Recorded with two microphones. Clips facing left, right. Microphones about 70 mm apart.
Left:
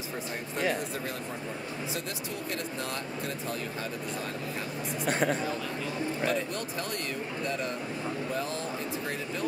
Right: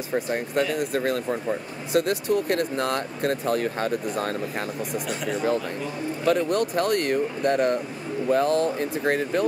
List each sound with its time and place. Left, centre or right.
0.1 s speech: right
5.0 s speech: left
6.2 s speech: right